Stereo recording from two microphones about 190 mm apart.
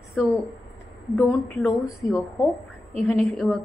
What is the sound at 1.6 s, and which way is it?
Speech, 15° left (ahead or behind).